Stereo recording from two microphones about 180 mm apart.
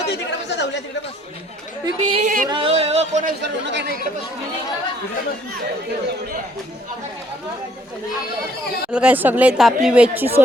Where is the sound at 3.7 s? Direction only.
70° right (ahead or behind).